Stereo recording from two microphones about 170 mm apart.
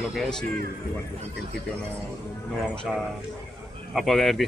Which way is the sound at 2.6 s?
5° right (ahead or behind).